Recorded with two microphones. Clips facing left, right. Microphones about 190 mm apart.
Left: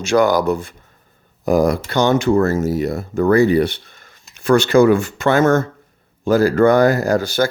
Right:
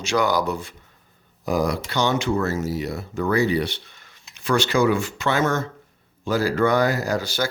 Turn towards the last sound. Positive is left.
turn(degrees=50)  # may be behind; listen again after turning